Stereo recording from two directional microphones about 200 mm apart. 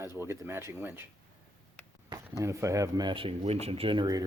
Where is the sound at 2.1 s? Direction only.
15° right (ahead or behind).